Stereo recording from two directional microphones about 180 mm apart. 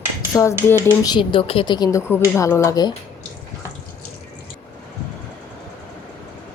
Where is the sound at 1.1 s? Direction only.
30° left (ahead or behind).